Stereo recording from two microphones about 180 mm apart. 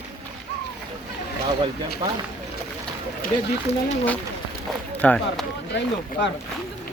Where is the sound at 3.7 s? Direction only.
35° left (ahead or behind).